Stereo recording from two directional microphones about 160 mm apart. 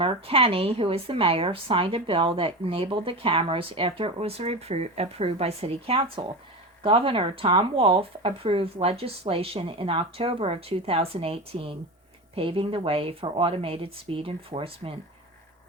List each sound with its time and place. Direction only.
0.0 s a woman's voice: 35° right (ahead or behind)